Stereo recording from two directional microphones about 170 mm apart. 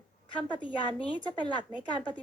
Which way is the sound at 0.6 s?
30° left (ahead or behind).